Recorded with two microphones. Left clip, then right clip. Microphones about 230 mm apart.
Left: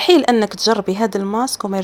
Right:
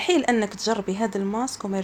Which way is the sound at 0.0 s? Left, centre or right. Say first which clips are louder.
Left 8 dB; left.